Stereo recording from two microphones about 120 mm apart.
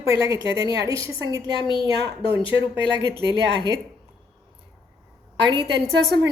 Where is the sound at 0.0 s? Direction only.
25° right (ahead or behind).